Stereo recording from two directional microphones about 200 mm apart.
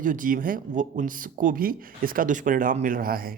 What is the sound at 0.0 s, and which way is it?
Speech, 40° right (ahead or behind).